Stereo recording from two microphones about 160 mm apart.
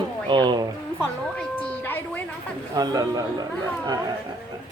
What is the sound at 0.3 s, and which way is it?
Speech, 30° right (ahead or behind).